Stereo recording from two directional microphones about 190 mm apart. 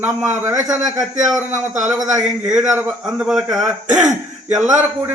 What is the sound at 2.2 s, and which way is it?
A man's voice, 5° right (ahead or behind).